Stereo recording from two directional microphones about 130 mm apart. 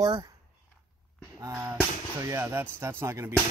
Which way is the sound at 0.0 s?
35° right (ahead or behind).